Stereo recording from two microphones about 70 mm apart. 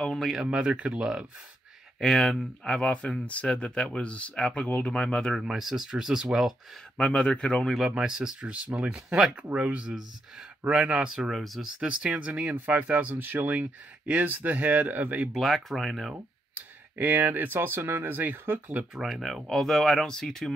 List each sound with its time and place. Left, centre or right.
0.0 s speech: centre
0.3 s speech: centre
2.0 s speech: centre
5.3 s speech: centre
7.0 s speech: centre
7.9 s speech: centre
11.2 s speech: centre
11.8 s speech: centre
15.3 s speech: centre
16.5 s speech: right
18.9 s speech: centre